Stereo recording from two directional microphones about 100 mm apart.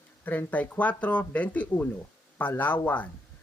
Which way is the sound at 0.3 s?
15° left (ahead or behind).